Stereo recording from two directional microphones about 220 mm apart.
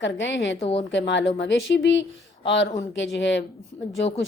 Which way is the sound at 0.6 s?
25° left (ahead or behind).